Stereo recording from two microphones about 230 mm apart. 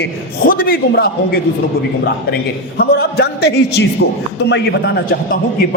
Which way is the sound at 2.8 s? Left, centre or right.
Left.